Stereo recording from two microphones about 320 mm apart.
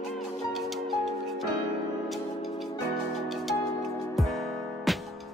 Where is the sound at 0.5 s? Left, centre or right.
Centre.